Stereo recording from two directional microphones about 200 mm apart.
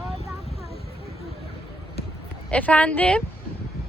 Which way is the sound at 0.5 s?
30° left (ahead or behind).